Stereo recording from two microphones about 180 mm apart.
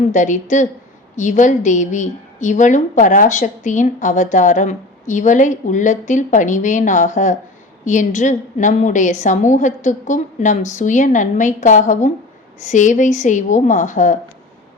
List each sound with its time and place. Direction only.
0.1 s a woman's voice: 45° left (ahead or behind)